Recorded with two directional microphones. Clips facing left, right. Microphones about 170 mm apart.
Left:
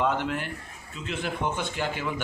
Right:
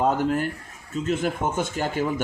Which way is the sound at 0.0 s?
40° right (ahead or behind).